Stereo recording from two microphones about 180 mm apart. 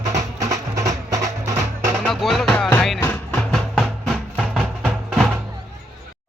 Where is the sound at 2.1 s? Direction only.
Centre (ahead or behind).